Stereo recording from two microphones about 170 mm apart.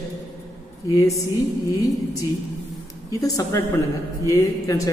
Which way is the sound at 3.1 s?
20° left (ahead or behind).